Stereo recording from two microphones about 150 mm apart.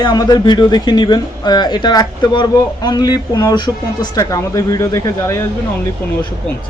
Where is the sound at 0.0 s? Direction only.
25° left (ahead or behind).